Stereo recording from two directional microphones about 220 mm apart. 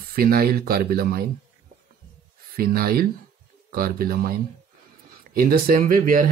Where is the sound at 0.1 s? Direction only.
40° right (ahead or behind).